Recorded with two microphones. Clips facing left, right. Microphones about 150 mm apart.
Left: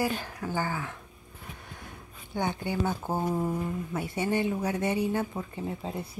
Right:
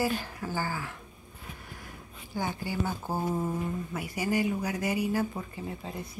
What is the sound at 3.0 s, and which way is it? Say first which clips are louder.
A woman's voice: left 2 dB; 20° left (ahead or behind).